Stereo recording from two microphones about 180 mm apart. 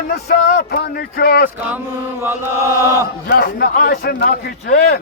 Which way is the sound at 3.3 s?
65° left (ahead or behind).